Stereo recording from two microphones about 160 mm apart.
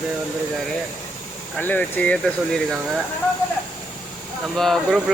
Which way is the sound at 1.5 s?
10° left (ahead or behind).